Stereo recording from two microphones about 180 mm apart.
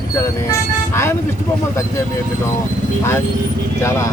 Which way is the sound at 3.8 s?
15° left (ahead or behind).